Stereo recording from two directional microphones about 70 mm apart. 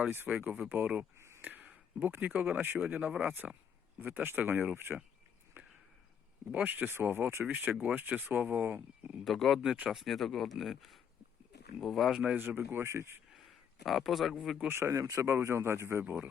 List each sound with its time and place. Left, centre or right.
0.4 s speech: right
1.4 s a sound: right
2.0 s speech: right
2.9 s speech: centre; by 4.9 s right
5.6 s a sound: right
6.5 s speech: right
8.6 s speech: right
9.2 s speech: centre
12.1 s speech: centre
12.4 s speech: right
13.8 s speech: centre
14.7 s speech: right
16.0 s speech: right